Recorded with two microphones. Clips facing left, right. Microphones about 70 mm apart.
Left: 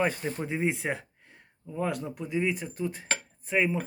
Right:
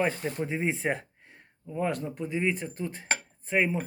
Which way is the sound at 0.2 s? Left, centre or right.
Centre.